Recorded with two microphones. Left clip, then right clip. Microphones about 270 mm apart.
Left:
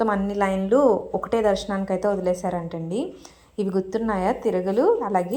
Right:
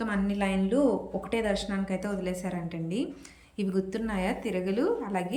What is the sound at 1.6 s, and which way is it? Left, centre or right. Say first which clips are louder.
Speech: left 10 dB; left.